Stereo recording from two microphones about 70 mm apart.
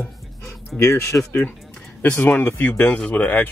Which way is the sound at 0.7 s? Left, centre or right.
Left.